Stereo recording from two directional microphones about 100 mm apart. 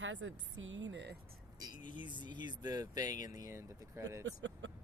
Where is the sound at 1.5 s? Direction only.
50° right (ahead or behind); by 4.4 s 30° right (ahead or behind).